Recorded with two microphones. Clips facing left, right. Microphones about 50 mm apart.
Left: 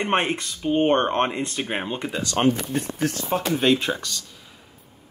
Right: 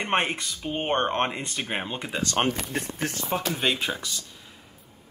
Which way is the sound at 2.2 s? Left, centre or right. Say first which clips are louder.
Left 5 dB; right.